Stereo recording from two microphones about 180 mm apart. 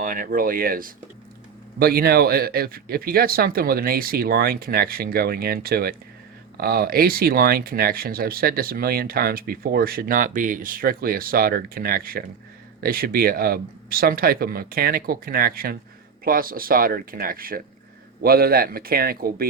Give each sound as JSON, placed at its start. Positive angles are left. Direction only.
{"t": 0.0, "sound": "speech", "side_deg": -50}